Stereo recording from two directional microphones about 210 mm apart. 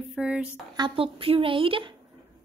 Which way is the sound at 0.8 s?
25° right (ahead or behind).